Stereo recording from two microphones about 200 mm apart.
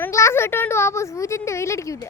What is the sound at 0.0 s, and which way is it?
A woman's voice, 15° left (ahead or behind).